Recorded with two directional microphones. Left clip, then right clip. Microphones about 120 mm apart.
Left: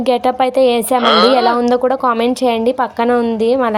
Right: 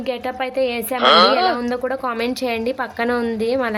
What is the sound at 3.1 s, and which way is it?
Speech, 10° left (ahead or behind).